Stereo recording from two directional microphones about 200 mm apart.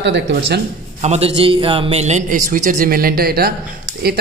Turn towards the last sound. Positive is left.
turn(degrees=-50)  # may be behind; listen again after turning